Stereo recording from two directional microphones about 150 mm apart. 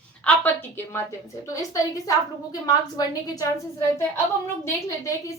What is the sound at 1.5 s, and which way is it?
A woman's voice, 25° left (ahead or behind).